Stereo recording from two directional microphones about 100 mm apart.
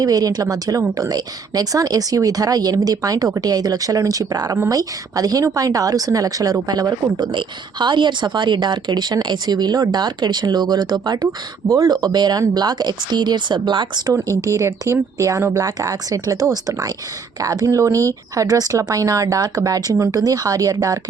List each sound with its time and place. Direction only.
0.0 s a woman's voice: 40° right (ahead or behind)
14.1 s speech: 30° right (ahead or behind)